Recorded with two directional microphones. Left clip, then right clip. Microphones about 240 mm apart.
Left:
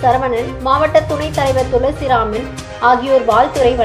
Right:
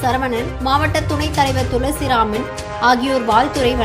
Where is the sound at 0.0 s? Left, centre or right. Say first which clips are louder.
Left 5 dB; right.